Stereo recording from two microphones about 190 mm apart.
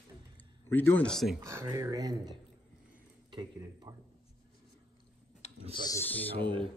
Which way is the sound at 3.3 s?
20° right (ahead or behind).